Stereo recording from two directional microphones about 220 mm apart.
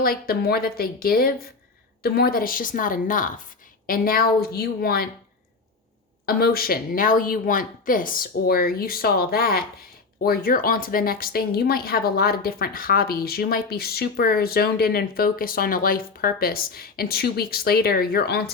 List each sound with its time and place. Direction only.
0.0 s a woman's voice: 40° left (ahead or behind)
6.2 s speech: 45° left (ahead or behind)